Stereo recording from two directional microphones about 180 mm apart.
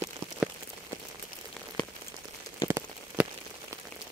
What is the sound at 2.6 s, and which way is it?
Rain on surface, 10° right (ahead or behind).